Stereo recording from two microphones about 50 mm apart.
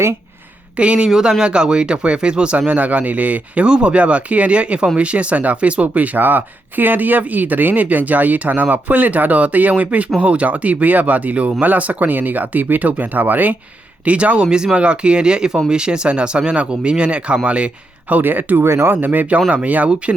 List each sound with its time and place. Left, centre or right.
0.8 s speech: right
18.1 s speech: right
18.7 s speech: right
18.9 s speech: right